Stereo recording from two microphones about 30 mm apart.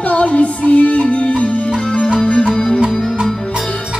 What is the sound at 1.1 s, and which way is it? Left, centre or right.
Music, left.